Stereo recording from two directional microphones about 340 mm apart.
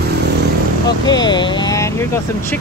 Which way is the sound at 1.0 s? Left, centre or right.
Centre.